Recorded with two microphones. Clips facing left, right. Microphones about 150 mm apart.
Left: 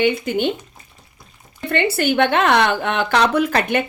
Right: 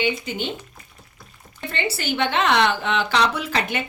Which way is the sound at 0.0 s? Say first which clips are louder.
Left 7 dB; 55° left (ahead or behind).